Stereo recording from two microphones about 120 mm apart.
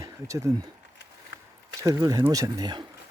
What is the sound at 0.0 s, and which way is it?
Speech, 25° right (ahead or behind).